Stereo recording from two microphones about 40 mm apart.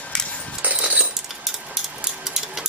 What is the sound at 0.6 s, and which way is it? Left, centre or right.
Dog, right.